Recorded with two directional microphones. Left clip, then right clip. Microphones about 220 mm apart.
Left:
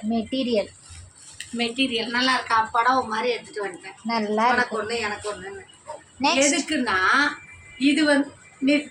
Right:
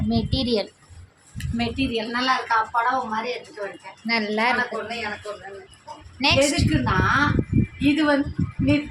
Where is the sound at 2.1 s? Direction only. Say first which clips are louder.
Even; 15° right (ahead or behind).